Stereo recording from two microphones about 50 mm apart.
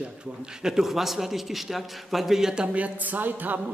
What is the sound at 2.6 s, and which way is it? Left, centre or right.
A woman's voice, right.